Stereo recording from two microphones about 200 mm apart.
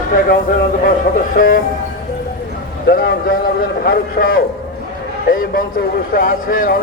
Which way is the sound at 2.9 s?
45° left (ahead or behind).